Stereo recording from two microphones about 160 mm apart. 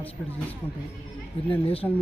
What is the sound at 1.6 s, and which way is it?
Speech, 35° left (ahead or behind).